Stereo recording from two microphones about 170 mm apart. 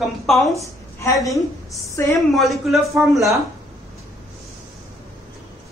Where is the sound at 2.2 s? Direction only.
Centre (ahead or behind).